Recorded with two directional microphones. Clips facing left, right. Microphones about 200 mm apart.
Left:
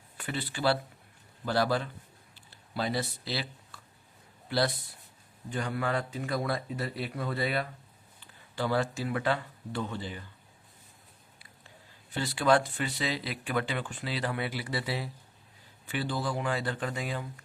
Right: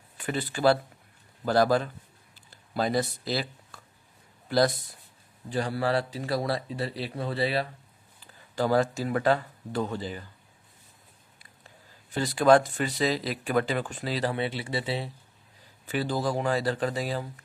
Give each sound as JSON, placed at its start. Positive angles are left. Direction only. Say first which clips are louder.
{"t": 0.3, "sound": "speech", "louder": "right 5 dB", "side_deg": -45}
{"t": 2.3, "sound": "a sound", "louder": "right 5 dB", "side_deg": -45}
{"t": 4.4, "sound": "speech", "louder": "right 5 dB", "side_deg": -45}
{"t": 5.5, "sound": "speech", "louder": "right 4 dB", "side_deg": -35}
{"t": 8.2, "sound": "speech", "louder": "right 5 dB", "side_deg": -40}
{"t": 12.1, "sound": "speech", "louder": "right 5 dB", "side_deg": -45}
{"t": 15.9, "sound": "speech", "louder": "right 4 dB", "side_deg": -40}